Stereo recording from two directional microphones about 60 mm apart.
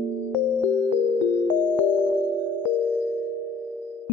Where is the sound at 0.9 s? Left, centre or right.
Right.